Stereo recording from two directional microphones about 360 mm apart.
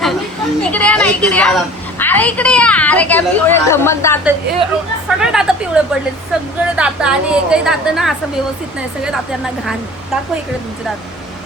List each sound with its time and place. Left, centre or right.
0.6 s a woman's voice: centre